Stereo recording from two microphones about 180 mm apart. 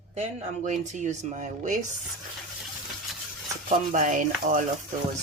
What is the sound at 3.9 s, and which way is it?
Speech, 45° right (ahead or behind).